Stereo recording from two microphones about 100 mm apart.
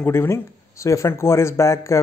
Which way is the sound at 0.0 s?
25° left (ahead or behind).